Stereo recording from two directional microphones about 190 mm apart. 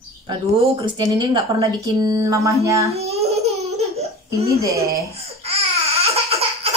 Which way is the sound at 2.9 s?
35° right (ahead or behind).